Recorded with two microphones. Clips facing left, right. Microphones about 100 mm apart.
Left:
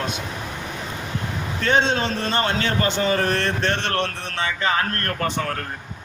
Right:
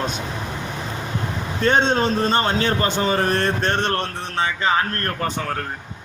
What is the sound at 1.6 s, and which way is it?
A man's voice, 40° right (ahead or behind).